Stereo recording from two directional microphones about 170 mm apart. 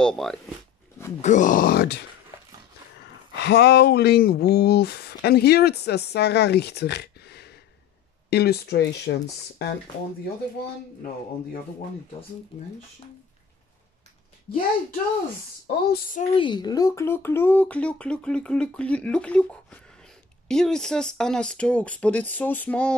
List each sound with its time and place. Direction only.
0.0 s speech: centre (ahead or behind)
1.2 s speech: 50° left (ahead or behind); by 2.0 s 75° left (ahead or behind)
3.3 s speech: 80° left
15.6 s speech: 55° left (ahead or behind)
16.3 s speech: 25° left (ahead or behind); by 22.9 s 10° left (ahead or behind)